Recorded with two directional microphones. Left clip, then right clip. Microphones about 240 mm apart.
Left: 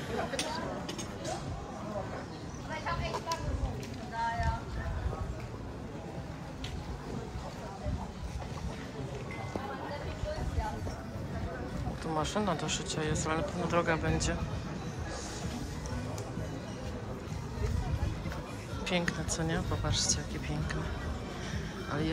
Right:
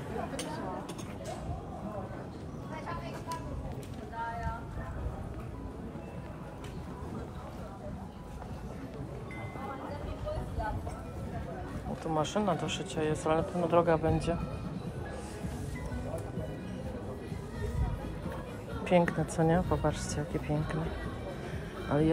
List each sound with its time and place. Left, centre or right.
12.2 s speech: centre
18.9 s a woman's voice: right
21.9 s a woman's voice: centre